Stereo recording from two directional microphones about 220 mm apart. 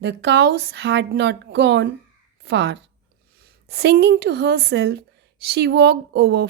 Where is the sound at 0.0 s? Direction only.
50° right (ahead or behind).